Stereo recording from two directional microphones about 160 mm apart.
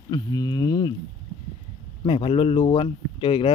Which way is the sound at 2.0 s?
35° left (ahead or behind).